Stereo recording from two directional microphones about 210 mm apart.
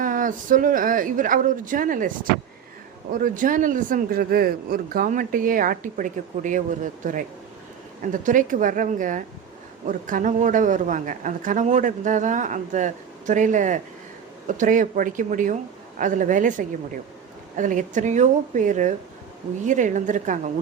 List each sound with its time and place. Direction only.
0.0 s speech: 40° right (ahead or behind)